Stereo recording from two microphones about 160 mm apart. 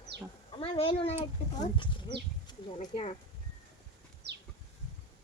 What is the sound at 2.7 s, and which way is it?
Speech, 40° left (ahead or behind).